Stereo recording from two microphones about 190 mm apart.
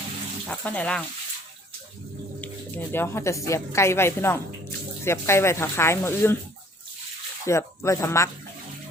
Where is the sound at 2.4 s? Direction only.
10° left (ahead or behind).